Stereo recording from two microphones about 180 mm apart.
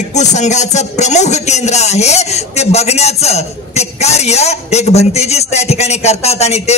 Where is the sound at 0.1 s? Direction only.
40° left (ahead or behind).